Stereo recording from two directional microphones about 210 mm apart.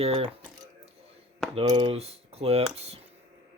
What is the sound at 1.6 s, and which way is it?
Speech, 25° right (ahead or behind).